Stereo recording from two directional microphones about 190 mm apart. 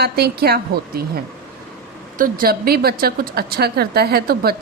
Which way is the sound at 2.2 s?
50° right (ahead or behind).